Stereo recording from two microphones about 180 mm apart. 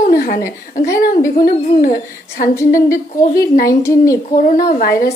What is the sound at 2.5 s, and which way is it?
A woman's voice, 15° left (ahead or behind).